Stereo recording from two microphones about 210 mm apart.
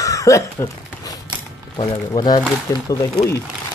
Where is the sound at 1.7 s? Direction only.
20° left (ahead or behind).